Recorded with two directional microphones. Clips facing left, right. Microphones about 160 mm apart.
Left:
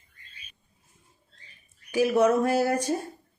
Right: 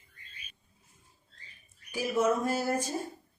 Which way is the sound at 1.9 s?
70° left (ahead or behind).